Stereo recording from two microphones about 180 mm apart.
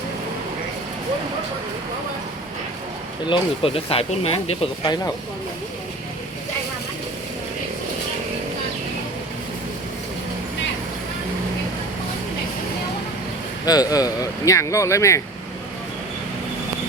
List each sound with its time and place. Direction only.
3.2 s speech: 30° left (ahead or behind)
13.7 s speech: 20° left (ahead or behind)